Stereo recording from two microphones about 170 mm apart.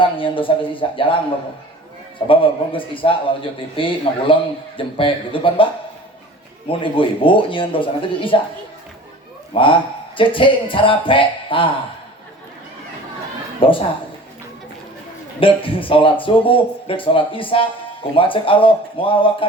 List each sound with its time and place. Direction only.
0.0 s a man's voice: 30° left (ahead or behind)
2.2 s a man's voice: 30° left (ahead or behind)
6.7 s a man's voice: 30° left (ahead or behind)
9.5 s a man's voice: 30° left (ahead or behind)
13.6 s a man's voice: 30° left (ahead or behind)
15.4 s a man's voice: 30° left (ahead or behind)